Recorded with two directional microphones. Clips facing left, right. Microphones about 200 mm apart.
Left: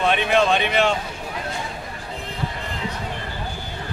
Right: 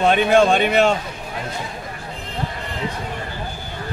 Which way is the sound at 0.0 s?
45° right (ahead or behind).